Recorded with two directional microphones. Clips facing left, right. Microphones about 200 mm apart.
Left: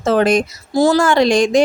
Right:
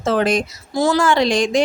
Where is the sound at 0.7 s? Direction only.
35° left (ahead or behind).